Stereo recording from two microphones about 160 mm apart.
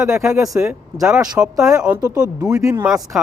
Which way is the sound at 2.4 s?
20° right (ahead or behind).